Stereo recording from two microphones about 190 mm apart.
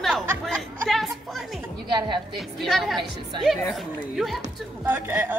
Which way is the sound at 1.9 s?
25° right (ahead or behind).